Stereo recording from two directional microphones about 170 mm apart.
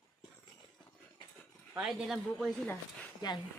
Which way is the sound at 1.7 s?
5° right (ahead or behind).